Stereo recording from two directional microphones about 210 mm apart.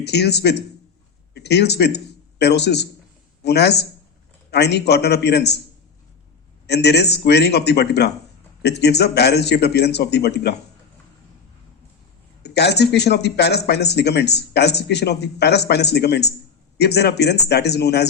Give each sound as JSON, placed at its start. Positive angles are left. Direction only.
{"t": 0.0, "sound": "speech", "side_deg": 50}
{"t": 6.7, "sound": "speech", "side_deg": 50}
{"t": 12.4, "sound": "speech", "side_deg": 50}